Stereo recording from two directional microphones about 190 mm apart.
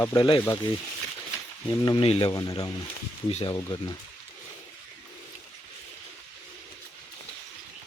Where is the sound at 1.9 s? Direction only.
30° left (ahead or behind).